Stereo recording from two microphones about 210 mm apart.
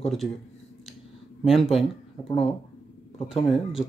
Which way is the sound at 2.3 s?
25° left (ahead or behind).